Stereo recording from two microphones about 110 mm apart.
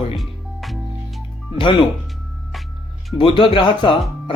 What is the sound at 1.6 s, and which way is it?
Speech, 50° left (ahead or behind).